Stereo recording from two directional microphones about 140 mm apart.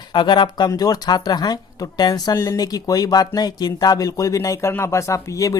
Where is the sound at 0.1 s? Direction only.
35° left (ahead or behind).